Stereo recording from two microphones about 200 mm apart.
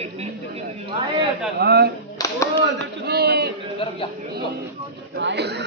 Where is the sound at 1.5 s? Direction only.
55° right (ahead or behind).